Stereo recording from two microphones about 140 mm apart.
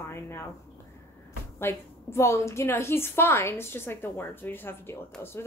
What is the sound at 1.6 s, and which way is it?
A woman's voice, 20° left (ahead or behind).